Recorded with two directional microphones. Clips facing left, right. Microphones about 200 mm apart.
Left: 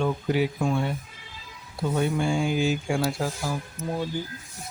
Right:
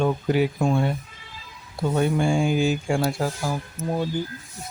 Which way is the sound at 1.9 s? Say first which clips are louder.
Right 3 dB; 50° right (ahead or behind).